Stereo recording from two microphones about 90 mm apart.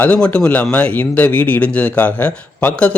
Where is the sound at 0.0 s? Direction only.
15° left (ahead or behind).